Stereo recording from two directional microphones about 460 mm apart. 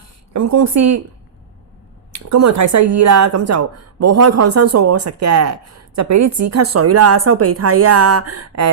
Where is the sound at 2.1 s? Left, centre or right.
Right.